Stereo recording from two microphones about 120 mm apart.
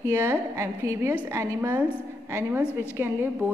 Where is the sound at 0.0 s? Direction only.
20° right (ahead or behind).